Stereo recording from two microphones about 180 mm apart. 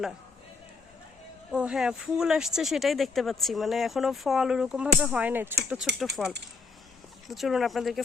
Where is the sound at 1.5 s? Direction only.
5° right (ahead or behind).